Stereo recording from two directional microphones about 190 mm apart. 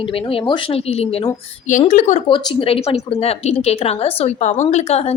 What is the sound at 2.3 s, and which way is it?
Speech, 25° left (ahead or behind).